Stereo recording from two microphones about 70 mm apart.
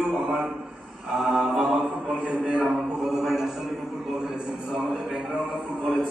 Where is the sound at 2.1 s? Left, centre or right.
Centre.